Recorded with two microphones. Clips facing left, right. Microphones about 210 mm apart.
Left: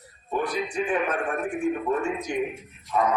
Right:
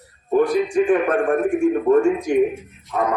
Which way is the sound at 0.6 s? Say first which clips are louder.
Right 9 dB; 45° right (ahead or behind).